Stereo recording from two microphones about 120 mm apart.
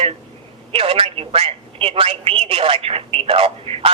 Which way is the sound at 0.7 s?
50° right (ahead or behind).